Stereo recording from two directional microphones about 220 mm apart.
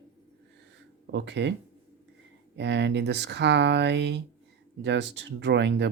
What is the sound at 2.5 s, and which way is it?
Speech, 50° right (ahead or behind).